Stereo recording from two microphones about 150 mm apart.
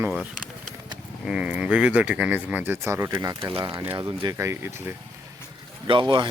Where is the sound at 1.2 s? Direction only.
5° right (ahead or behind).